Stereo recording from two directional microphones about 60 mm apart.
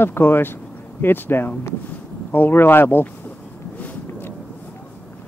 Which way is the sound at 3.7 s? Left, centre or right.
Left.